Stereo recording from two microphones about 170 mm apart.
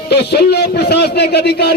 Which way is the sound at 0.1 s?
75° left (ahead or behind).